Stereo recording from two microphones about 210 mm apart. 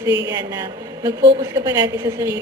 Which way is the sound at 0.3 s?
15° right (ahead or behind).